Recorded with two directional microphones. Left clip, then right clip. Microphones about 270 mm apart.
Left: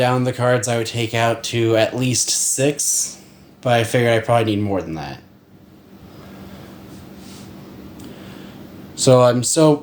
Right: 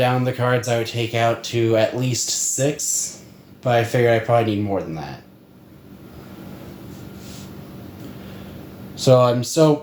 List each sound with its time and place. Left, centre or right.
0.0 s speech: left
9.0 s speech: left